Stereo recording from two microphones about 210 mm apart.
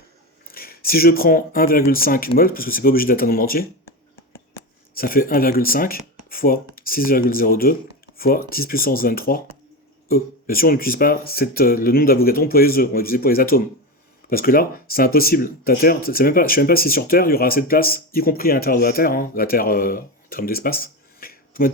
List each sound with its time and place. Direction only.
0.4 s speech: 45° left (ahead or behind)
4.9 s speech: 45° left (ahead or behind)